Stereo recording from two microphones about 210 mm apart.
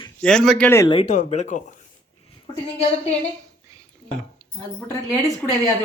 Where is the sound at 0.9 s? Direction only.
30° left (ahead or behind).